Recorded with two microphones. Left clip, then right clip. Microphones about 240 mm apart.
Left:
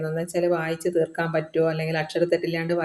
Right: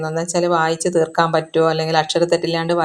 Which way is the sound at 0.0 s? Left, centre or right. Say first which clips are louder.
Right 5 dB; right.